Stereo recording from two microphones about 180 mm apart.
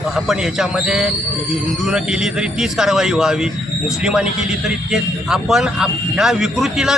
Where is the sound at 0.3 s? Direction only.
5° right (ahead or behind).